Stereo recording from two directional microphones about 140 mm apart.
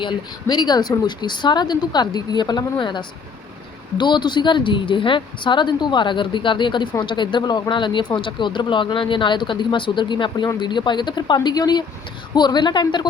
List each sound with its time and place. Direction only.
0.0 s speech: 30° left (ahead or behind)